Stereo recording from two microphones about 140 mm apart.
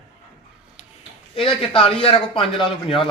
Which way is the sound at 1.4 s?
40° left (ahead or behind).